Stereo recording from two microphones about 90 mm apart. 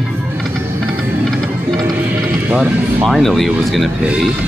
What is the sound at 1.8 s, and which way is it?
Music, 25° right (ahead or behind).